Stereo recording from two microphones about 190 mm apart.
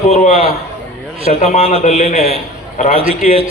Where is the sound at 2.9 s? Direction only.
30° right (ahead or behind).